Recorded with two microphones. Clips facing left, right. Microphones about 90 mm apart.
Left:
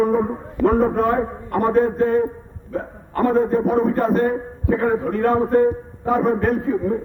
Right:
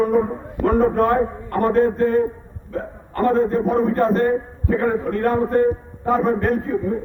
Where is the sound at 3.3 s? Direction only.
15° left (ahead or behind).